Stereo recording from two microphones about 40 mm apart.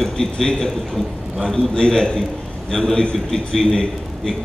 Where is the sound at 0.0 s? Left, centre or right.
Centre.